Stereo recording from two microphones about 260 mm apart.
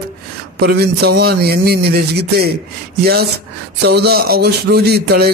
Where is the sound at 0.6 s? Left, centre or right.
Right.